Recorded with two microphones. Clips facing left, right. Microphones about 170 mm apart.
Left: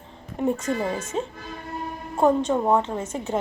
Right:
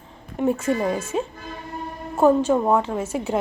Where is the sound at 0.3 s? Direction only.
5° right (ahead or behind).